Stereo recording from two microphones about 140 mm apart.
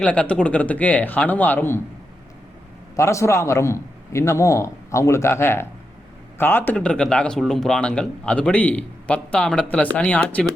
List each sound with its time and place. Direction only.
0.0 s a man's voice: 10° left (ahead or behind)
2.9 s a man's voice: 20° left (ahead or behind)